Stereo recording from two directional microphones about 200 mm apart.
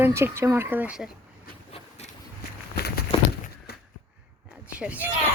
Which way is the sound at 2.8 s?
50° left (ahead or behind).